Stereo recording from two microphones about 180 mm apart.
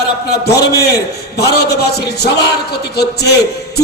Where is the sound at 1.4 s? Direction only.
65° left (ahead or behind).